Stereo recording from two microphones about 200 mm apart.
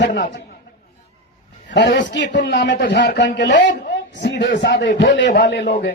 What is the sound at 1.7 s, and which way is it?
A man's voice, 60° left (ahead or behind).